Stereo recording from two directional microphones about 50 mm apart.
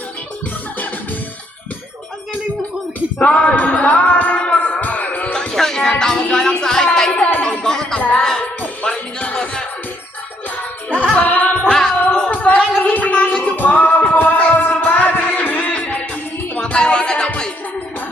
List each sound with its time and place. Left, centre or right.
3.2 s music: left
5.3 s music: centre
6.0 s speech: centre
6.3 s music: centre
10.6 s music: left
11.6 s music: centre
12.3 s gargling: left
13.6 s music: left
16.7 s music: centre